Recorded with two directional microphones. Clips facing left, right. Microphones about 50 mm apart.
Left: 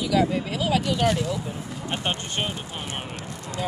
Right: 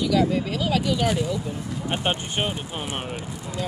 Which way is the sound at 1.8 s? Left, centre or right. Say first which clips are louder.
Right 3 dB; centre.